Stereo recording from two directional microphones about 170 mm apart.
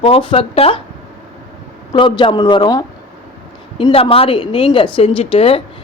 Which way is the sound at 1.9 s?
30° left (ahead or behind).